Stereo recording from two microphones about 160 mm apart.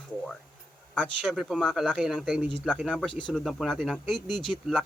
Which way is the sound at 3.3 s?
Centre (ahead or behind).